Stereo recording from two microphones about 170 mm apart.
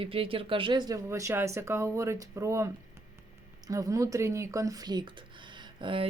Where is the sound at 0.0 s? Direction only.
35° right (ahead or behind).